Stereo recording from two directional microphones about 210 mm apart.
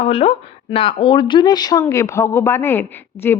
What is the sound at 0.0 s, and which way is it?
A woman's voice, 30° left (ahead or behind).